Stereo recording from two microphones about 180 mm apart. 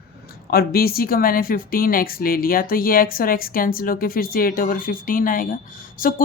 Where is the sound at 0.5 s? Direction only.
55° left (ahead or behind).